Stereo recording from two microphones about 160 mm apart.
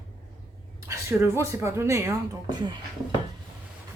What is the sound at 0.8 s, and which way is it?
Speech, 15° right (ahead or behind).